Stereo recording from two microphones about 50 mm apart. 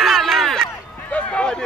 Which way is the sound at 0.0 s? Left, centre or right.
Centre.